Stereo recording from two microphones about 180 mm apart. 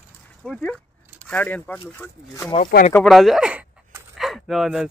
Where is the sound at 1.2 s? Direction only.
10° left (ahead or behind).